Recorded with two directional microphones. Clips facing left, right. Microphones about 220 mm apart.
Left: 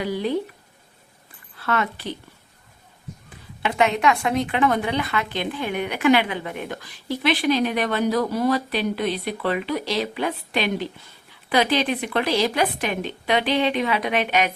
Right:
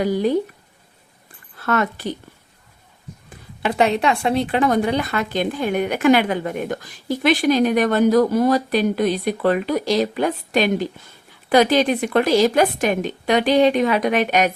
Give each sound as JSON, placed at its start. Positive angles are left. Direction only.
{"t": 0.0, "sound": "a woman's voice", "side_deg": -45}
{"t": 1.5, "sound": "speech", "side_deg": -45}
{"t": 3.6, "sound": "a woman's voice", "side_deg": -35}